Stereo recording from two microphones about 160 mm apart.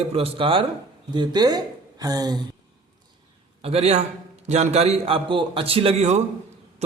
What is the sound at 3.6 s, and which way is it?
A man's voice, 40° right (ahead or behind).